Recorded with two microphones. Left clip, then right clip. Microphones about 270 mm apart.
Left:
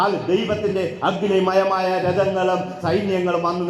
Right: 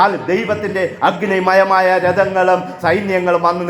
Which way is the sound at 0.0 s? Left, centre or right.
Right.